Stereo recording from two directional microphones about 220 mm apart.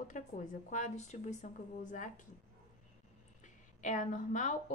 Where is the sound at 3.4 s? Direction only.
35° left (ahead or behind).